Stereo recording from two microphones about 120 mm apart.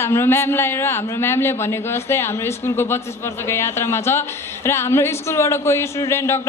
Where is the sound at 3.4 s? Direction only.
20° left (ahead or behind).